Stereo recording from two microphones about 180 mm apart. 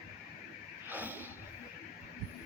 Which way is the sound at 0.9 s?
10° right (ahead or behind).